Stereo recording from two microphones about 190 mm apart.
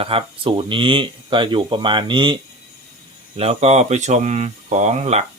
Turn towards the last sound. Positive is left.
turn(degrees=-35)  # may be behind; listen again after turning